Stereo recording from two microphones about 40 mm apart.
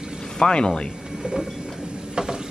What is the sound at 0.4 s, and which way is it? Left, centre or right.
Speech, left.